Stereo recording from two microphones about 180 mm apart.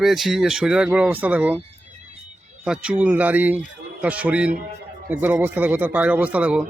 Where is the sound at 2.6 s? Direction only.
5° right (ahead or behind).